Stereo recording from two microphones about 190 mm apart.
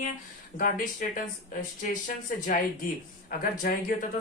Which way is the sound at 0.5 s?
45° left (ahead or behind).